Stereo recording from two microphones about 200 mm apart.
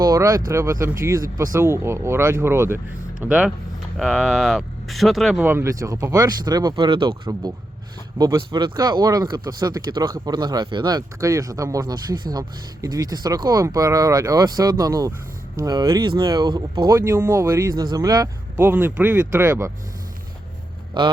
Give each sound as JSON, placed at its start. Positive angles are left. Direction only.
{"t": 0.0, "sound": "speech", "side_deg": -15}
{"t": 20.9, "sound": "speech", "side_deg": -25}